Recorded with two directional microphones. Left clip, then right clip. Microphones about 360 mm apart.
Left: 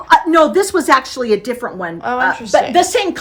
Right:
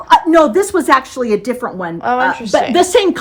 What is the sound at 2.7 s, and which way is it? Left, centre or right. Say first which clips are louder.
Speech: right 2 dB; centre.